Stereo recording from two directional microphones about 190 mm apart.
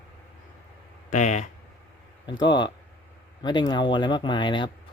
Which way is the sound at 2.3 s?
25° left (ahead or behind).